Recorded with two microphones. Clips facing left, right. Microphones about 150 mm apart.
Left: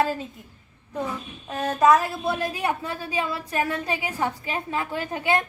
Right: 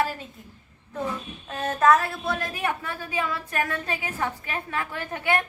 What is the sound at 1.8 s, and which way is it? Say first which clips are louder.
Speech: left 2 dB; 15° left (ahead or behind).